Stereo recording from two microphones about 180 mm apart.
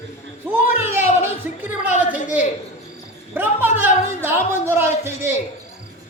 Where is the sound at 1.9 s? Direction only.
45° left (ahead or behind).